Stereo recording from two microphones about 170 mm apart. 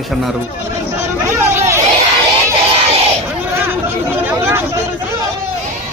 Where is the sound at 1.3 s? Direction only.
15° right (ahead or behind).